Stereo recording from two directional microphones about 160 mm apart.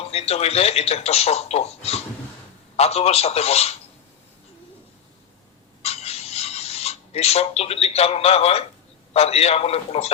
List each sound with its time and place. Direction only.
0.0 s speech: 40° left (ahead or behind)
5.8 s a sound: 40° left (ahead or behind)
9.1 s speech: 40° left (ahead or behind)